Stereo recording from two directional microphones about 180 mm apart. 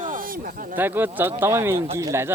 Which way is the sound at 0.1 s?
50° right (ahead or behind).